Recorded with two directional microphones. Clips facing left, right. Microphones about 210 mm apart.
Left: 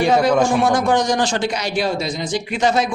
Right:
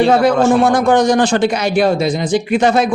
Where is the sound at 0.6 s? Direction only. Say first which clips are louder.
Right 5 dB; 55° right (ahead or behind).